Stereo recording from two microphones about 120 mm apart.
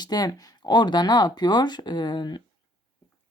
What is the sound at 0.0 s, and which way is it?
Speech, 35° left (ahead or behind).